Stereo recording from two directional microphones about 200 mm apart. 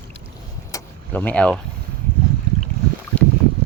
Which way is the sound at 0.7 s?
10° left (ahead or behind).